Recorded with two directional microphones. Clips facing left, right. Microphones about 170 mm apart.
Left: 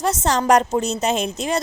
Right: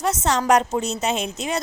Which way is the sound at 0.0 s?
35° left (ahead or behind).